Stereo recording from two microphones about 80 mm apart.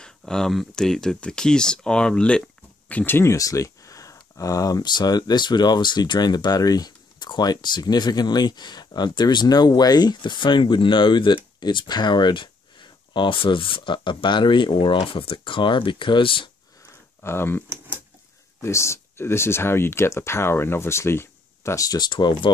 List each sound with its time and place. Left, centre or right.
0.0 s speech: centre
3.2 s speech: left
17.2 s speech: left
21.8 s speech: left